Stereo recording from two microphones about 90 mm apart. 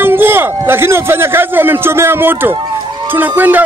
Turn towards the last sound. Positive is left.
turn(degrees=-20)  # may be behind; listen again after turning